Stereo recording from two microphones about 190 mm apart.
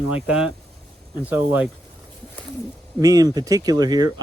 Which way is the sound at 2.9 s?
20° right (ahead or behind).